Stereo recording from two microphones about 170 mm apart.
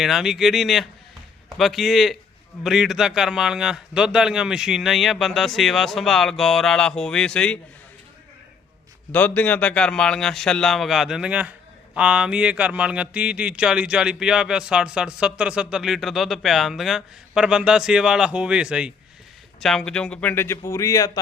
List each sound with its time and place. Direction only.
0.0 s speech: centre (ahead or behind)
9.1 s a man's voice: 10° left (ahead or behind)